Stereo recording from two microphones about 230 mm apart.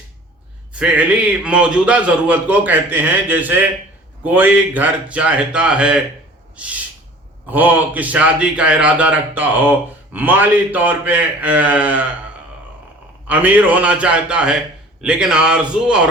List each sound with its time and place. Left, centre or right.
0.7 s a man's voice: centre
7.4 s a man's voice: centre
13.2 s a man's voice: centre